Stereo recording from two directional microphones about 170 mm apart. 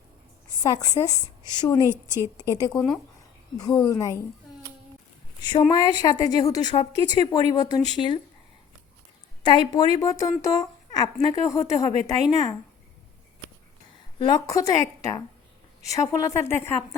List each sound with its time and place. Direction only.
0.6 s a woman's voice: 20° left (ahead or behind)
2.7 s speech: 5° left (ahead or behind)
3.6 s a woman's voice: 20° left (ahead or behind)
5.4 s a woman's voice: 25° left (ahead or behind)
9.4 s a woman's voice: 25° left (ahead or behind)
14.2 s a woman's voice: 25° left (ahead or behind)